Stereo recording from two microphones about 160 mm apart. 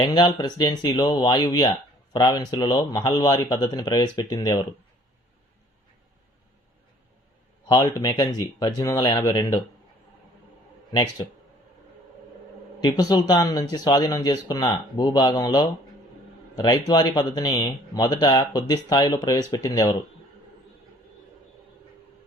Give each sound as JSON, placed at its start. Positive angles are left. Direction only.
{"t": 0.0, "sound": "speech", "side_deg": 25}
{"t": 7.7, "sound": "speech", "side_deg": 20}
{"t": 10.9, "sound": "speech", "side_deg": 25}
{"t": 12.8, "sound": "speech", "side_deg": 25}